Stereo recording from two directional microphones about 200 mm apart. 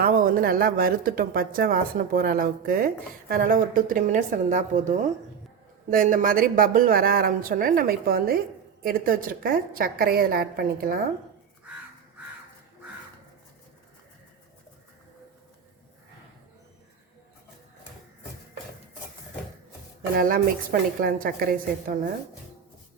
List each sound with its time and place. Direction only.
0.0 s speech: 45° right (ahead or behind)
20.1 s speech: 45° right (ahead or behind)